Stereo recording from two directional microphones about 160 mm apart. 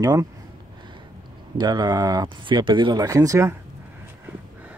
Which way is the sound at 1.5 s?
25° right (ahead or behind).